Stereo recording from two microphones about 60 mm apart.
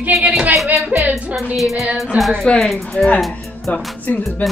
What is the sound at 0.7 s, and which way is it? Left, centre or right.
Speech, right.